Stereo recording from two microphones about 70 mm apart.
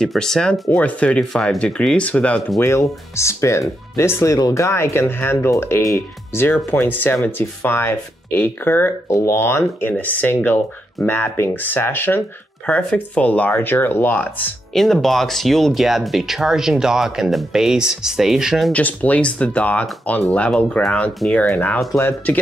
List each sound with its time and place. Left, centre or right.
0.0 s speech: centre
0.7 s speech: centre
1.3 s speech: centre
2.6 s speech: left
9.1 s speech: left
12.6 s speech: left
14.7 s speech: centre
18.7 s speech: left
22.0 s speech: left